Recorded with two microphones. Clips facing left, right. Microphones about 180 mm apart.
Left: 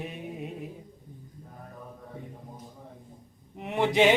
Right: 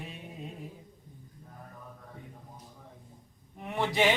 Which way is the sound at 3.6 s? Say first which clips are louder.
Left 5 dB; 20° left (ahead or behind).